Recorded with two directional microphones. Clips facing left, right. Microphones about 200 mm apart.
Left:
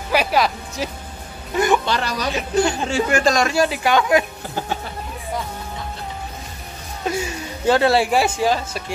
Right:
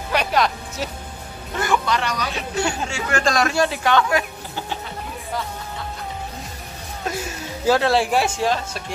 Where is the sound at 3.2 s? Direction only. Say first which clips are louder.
Left 2 dB; centre (ahead or behind).